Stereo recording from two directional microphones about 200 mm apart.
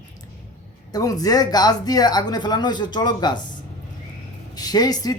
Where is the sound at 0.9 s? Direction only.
20° left (ahead or behind).